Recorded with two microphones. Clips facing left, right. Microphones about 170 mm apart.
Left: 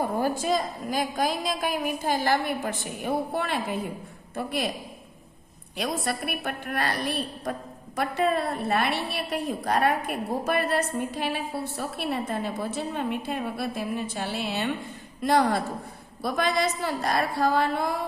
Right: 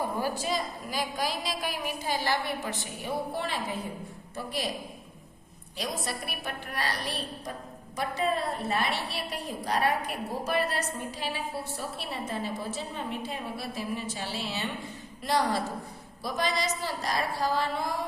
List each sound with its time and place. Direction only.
0.2 s a woman's voice: 50° left (ahead or behind)
5.7 s a woman's voice: 60° left (ahead or behind)